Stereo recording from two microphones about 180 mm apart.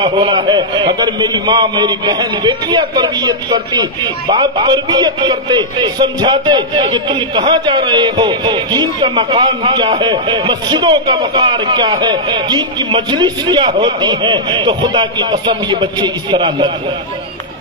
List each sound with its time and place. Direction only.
0.0 s a man's voice: 25° right (ahead or behind)